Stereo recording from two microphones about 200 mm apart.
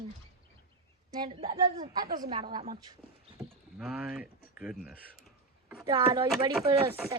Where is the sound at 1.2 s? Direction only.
25° right (ahead or behind).